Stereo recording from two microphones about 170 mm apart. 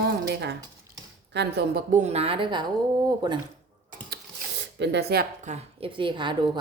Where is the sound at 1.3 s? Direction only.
85° right.